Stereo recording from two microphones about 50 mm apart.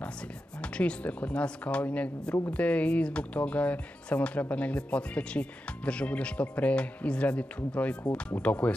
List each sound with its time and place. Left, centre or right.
0.6 s speech: left